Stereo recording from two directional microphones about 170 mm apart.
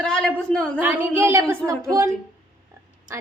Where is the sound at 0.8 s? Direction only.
10° right (ahead or behind).